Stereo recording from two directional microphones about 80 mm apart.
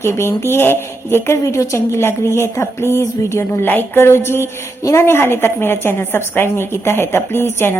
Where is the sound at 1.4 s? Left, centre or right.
Left.